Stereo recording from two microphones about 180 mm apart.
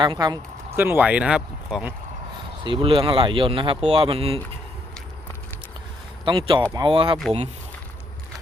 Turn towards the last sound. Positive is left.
turn(degrees=-30)  # may be behind; listen again after turning